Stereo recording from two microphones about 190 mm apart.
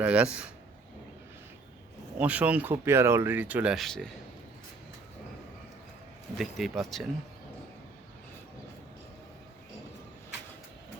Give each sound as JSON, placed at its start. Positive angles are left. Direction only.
{"t": 0.0, "sound": "speech", "side_deg": -5}
{"t": 2.1, "sound": "speech", "side_deg": -5}
{"t": 6.3, "sound": "speech", "side_deg": 0}